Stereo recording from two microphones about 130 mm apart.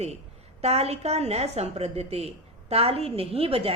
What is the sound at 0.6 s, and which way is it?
A woman's voice, 55° right (ahead or behind).